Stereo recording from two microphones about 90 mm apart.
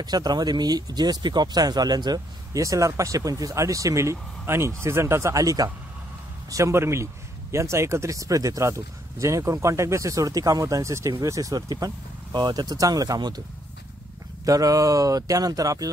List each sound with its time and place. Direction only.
0.0 s speech: 50° right (ahead or behind)
14.4 s speech: 40° right (ahead or behind)